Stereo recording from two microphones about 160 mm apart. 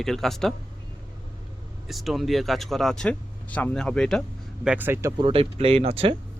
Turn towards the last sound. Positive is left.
turn(degrees=-35)  # may be behind; listen again after turning